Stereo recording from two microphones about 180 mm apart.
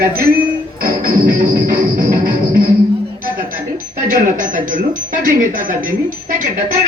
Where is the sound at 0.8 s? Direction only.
50° right (ahead or behind).